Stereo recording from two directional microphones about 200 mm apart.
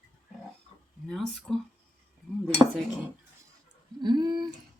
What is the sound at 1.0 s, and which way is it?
Speech, centre (ahead or behind).